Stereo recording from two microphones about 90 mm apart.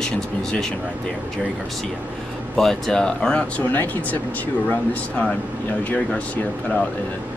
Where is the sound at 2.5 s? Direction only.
5° left (ahead or behind).